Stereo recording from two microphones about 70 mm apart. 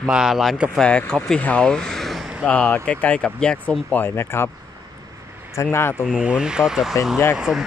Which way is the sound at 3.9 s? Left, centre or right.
Left.